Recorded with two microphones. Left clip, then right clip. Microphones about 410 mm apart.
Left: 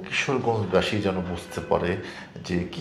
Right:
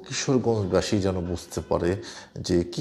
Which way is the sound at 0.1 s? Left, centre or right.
Right.